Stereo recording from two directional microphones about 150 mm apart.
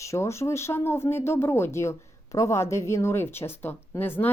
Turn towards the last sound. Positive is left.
turn(degrees=15)  # may be behind; listen again after turning